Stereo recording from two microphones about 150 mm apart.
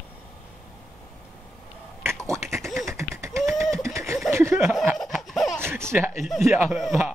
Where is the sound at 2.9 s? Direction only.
20° right (ahead or behind).